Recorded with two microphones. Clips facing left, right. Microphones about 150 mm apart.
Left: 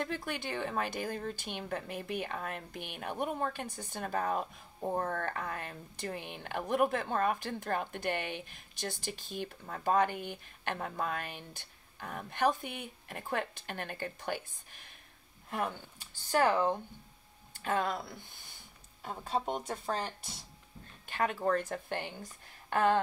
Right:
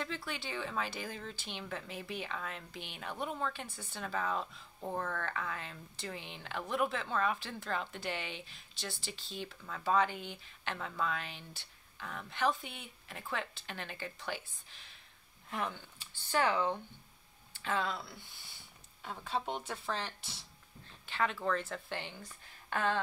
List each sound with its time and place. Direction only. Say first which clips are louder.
0.0 s speech: left 4 dB; 50° left (ahead or behind)